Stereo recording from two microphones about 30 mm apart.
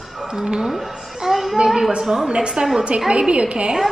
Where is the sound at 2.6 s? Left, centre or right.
Right.